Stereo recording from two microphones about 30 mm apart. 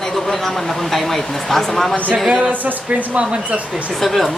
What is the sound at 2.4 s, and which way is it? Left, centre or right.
Speech, right.